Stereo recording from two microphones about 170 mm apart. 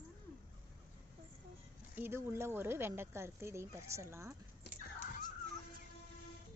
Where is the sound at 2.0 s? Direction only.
15° right (ahead or behind).